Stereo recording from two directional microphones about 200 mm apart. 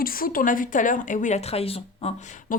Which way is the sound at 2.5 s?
45° left (ahead or behind).